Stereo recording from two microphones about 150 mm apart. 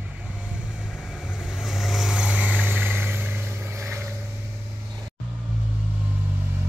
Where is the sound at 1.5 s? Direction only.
Centre (ahead or behind); by 4.1 s 20° right (ahead or behind).